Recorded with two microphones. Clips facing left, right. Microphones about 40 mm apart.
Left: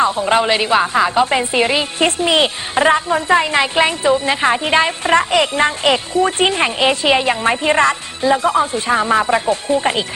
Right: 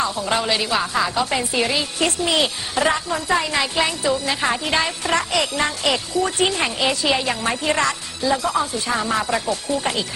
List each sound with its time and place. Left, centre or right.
0.0 s a woman's voice: left